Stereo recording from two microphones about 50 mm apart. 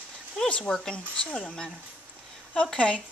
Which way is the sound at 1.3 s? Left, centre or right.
Centre.